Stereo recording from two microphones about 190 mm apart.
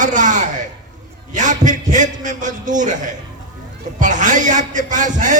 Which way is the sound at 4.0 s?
40° right (ahead or behind).